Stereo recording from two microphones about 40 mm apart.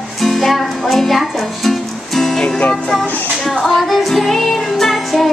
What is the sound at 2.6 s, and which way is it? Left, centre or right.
Music, left.